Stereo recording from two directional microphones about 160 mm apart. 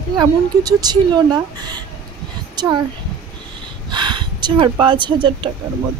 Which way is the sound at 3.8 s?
30° right (ahead or behind).